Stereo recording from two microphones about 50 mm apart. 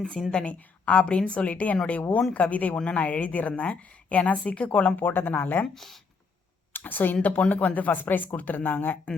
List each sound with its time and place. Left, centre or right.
0.1 s a woman's voice: centre
4.9 s speech: left
5.6 s speech: centre
6.7 s speech: left